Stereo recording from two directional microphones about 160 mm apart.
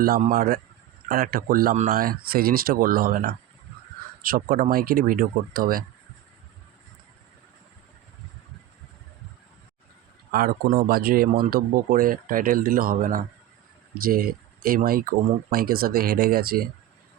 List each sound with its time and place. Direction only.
0.2 s speech: 60° right (ahead or behind)
10.3 s speech: 65° right (ahead or behind)